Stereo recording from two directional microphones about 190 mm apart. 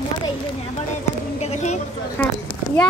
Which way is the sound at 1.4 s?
35° left (ahead or behind).